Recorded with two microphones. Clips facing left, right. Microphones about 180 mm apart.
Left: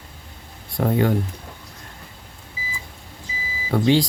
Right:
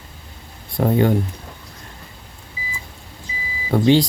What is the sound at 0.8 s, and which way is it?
Speech, 25° right (ahead or behind).